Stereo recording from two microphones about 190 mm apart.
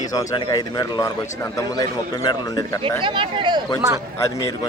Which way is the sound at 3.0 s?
25° right (ahead or behind).